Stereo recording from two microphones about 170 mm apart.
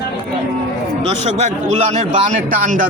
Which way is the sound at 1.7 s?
40° right (ahead or behind).